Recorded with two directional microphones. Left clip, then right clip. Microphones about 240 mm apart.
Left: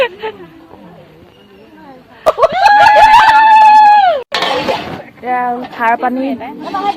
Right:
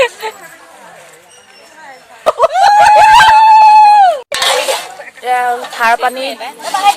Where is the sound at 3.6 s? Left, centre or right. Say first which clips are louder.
Right 1 dB; centre.